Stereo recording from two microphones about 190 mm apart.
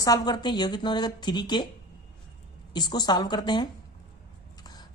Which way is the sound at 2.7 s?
20° left (ahead or behind).